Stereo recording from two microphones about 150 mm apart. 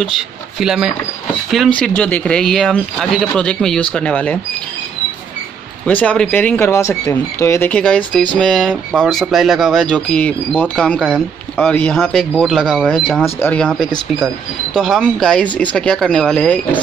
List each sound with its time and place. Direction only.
0.6 s speech: 5° right (ahead or behind)
1.8 s speech: 10° left (ahead or behind)
5.9 s speech: 10° left (ahead or behind)